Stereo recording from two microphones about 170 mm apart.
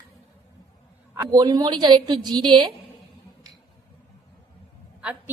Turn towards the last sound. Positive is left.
turn(degrees=-10)  # may be behind; listen again after turning